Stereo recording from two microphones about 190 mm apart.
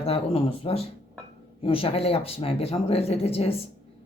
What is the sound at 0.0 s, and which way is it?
Speech, 30° left (ahead or behind).